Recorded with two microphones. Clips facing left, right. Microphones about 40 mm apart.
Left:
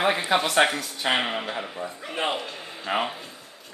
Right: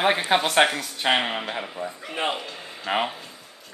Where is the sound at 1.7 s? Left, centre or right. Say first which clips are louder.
Right 1 dB; centre.